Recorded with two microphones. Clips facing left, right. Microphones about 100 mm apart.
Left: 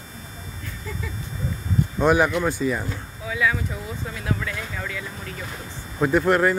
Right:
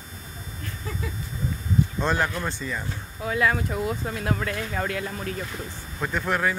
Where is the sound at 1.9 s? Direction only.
15° left (ahead or behind).